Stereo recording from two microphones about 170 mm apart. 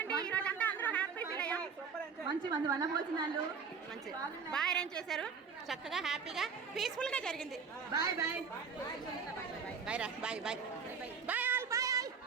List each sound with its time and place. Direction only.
0.3 s chatter: 10° left (ahead or behind)
2.2 s a woman's voice: 25° right (ahead or behind)
4.5 s a woman's voice: 5° left (ahead or behind)
7.9 s a woman's voice: 20° right (ahead or behind)
9.8 s a woman's voice: 5° right (ahead or behind)
11.3 s a sound: 10° right (ahead or behind)